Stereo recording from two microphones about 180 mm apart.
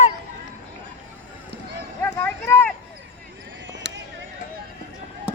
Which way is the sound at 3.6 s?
85° right.